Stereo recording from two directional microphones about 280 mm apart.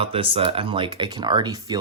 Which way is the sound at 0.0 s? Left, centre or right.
Centre.